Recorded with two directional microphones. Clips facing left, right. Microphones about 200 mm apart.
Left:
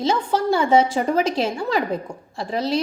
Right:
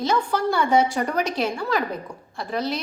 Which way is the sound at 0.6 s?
90° left.